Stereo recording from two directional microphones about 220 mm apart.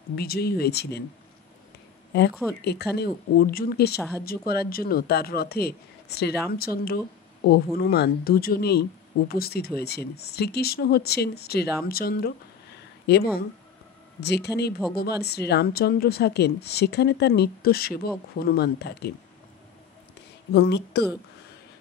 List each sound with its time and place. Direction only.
0.1 s a woman's voice: 45° left (ahead or behind)
2.6 s a woman's voice: 50° left (ahead or behind)
20.5 s a woman's voice: 50° left (ahead or behind)